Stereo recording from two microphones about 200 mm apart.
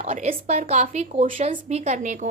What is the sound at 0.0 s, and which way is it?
A woman's voice, 35° right (ahead or behind).